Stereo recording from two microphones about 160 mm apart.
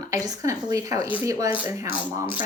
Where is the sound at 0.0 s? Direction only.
20° right (ahead or behind).